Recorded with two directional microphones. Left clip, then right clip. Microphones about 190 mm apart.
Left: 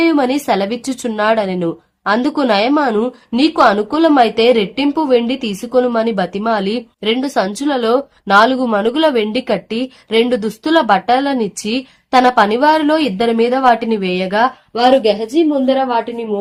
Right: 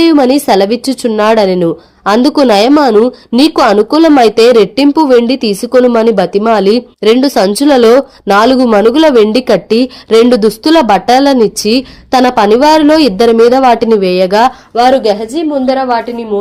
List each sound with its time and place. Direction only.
0.0 s speech: 35° right (ahead or behind)